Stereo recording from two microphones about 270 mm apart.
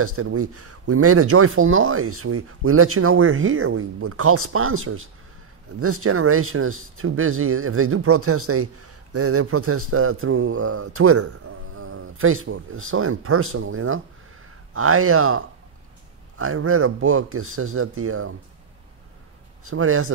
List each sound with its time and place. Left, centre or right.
0.0 s speech: right
19.6 s speech: right